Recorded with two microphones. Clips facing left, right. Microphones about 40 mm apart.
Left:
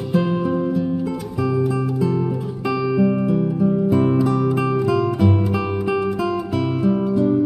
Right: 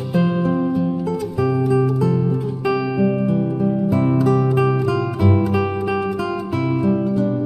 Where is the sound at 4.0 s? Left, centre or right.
Centre.